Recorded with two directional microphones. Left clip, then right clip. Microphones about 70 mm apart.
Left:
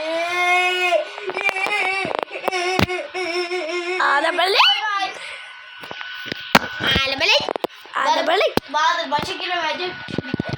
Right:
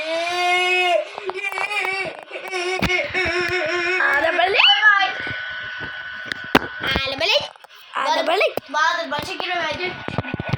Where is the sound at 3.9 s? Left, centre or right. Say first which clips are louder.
Left 1 dB; left.